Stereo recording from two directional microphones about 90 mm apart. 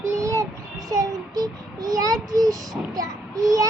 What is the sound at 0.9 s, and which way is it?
Child singing, 45° right (ahead or behind).